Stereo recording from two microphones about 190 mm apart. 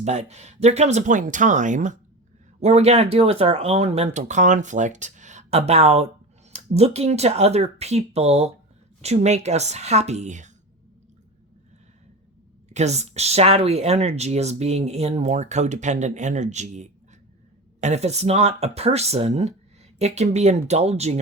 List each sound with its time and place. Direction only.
0.0 s speech: 35° right (ahead or behind)
12.6 s speech: 35° right (ahead or behind)